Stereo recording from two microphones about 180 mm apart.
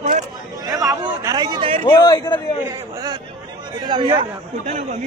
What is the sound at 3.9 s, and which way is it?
Speech, 25° right (ahead or behind).